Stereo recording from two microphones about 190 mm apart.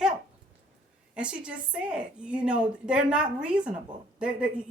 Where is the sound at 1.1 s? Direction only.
5° right (ahead or behind).